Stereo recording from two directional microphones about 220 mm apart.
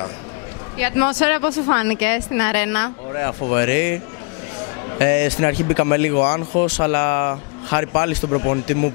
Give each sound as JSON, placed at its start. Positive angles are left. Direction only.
{"t": 0.7, "sound": "a woman's voice", "side_deg": 15}
{"t": 4.9, "sound": "a woman's voice", "side_deg": 15}
{"t": 6.1, "sound": "speech", "side_deg": 25}